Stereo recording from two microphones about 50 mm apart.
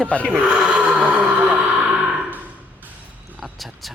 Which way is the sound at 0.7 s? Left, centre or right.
Right.